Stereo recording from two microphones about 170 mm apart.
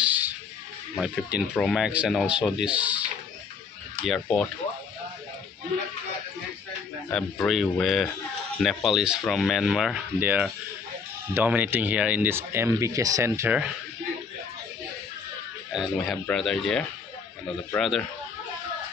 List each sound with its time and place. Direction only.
0.0 s a sound: 10° right (ahead or behind)
0.9 s speech: centre (ahead or behind)
4.0 s speech: 5° left (ahead or behind)
7.1 s speech: 5° left (ahead or behind); by 13.7 s 10° right (ahead or behind)
15.7 s speech: centre (ahead or behind)